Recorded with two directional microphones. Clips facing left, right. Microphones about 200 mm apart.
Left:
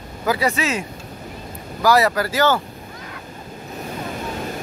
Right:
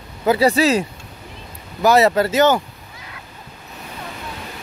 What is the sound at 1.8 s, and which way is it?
Speech, 25° right (ahead or behind).